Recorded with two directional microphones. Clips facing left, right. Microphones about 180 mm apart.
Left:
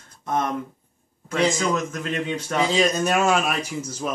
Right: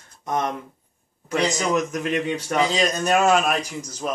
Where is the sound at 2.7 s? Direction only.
Centre (ahead or behind).